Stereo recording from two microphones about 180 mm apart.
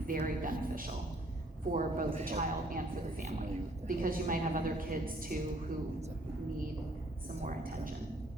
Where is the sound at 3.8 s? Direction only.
50° right (ahead or behind).